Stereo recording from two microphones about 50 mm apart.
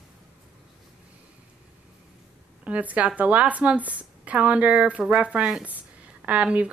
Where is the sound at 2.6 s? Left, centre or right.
Right.